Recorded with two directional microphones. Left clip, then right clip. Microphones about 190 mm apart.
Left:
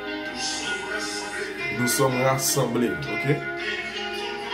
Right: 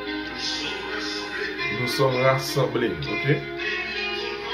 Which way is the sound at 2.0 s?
10° left (ahead or behind).